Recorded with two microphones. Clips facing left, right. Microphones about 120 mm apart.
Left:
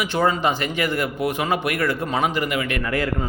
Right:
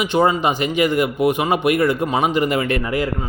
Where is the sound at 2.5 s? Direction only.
35° right (ahead or behind).